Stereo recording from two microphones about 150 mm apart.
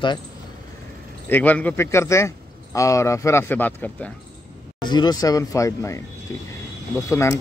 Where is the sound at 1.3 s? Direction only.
10° left (ahead or behind).